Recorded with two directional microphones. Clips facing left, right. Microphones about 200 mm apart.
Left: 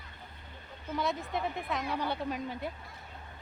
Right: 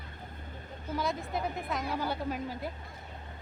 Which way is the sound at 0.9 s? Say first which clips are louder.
Even; centre (ahead or behind).